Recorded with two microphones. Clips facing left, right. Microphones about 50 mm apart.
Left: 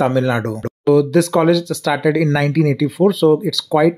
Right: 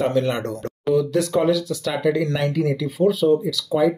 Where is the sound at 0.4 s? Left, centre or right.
Left.